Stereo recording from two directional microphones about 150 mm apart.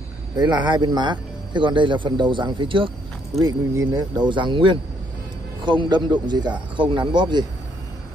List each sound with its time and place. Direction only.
0.4 s speech: 30° right (ahead or behind)
3.3 s speech: 25° right (ahead or behind)